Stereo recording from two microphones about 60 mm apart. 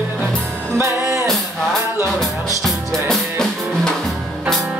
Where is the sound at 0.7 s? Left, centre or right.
Right.